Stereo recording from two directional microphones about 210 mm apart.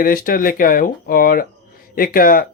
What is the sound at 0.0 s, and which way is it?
Speech, 40° left (ahead or behind).